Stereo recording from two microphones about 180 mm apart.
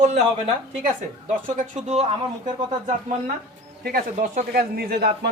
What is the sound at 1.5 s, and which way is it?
Speech, 40° right (ahead or behind).